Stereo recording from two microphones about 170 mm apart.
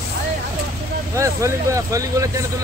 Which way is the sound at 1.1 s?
15° right (ahead or behind).